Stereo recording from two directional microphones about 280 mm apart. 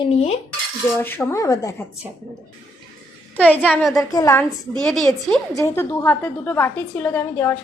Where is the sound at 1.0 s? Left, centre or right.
Centre.